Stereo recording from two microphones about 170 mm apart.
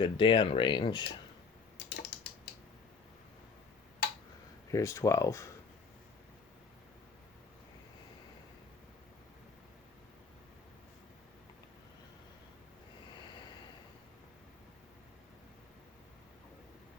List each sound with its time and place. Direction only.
0.0 s speech: 30° left (ahead or behind)
1.9 s typing: 80° left
4.7 s speech: 20° left (ahead or behind)